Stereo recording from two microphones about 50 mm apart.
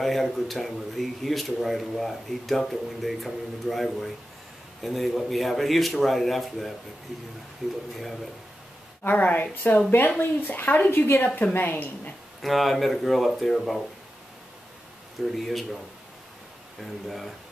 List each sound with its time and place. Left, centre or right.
0.0 s speech: centre
9.0 s a woman's voice: left
12.4 s speech: centre
15.3 s speech: centre
16.8 s speech: centre